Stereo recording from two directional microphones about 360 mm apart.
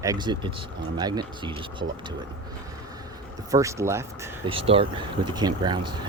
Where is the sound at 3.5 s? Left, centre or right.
Centre.